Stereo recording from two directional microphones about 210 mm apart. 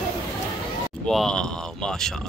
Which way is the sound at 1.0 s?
Centre (ahead or behind).